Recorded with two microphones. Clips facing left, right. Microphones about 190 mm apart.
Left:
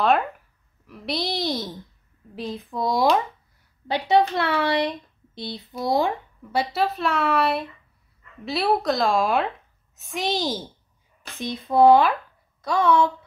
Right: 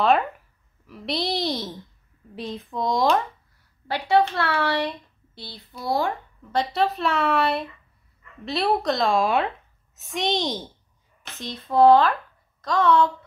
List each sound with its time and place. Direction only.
0.8 s a woman's voice: centre (ahead or behind)
3.8 s speech: 20° left (ahead or behind)
6.5 s a woman's voice: 5° left (ahead or behind)
11.3 s speech: 10° left (ahead or behind)